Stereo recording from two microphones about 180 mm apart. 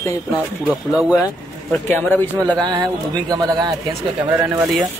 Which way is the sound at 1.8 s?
10° left (ahead or behind).